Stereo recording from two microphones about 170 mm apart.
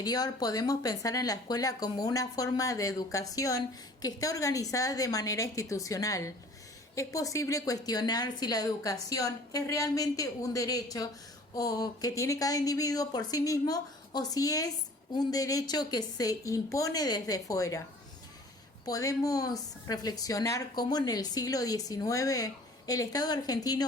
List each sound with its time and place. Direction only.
0.0 s a woman's voice: 25° left (ahead or behind)
18.9 s a woman's voice: 20° left (ahead or behind)